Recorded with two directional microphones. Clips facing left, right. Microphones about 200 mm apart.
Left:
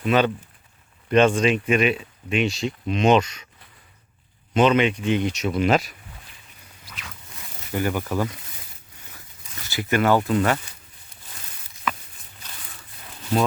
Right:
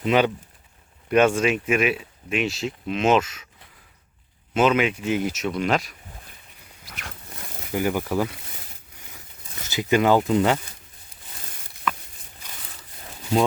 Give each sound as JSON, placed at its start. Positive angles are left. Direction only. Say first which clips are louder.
{"t": 0.0, "sound": "speech", "louder": "even", "side_deg": -15}
{"t": 4.5, "sound": "speech", "louder": "left 2 dB", "side_deg": -5}
{"t": 7.7, "sound": "speech", "louder": "right 1 dB", "side_deg": -15}
{"t": 9.6, "sound": "speech", "louder": "right 1 dB", "side_deg": -15}